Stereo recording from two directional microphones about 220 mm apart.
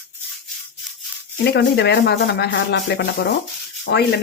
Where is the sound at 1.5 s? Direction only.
50° left (ahead or behind).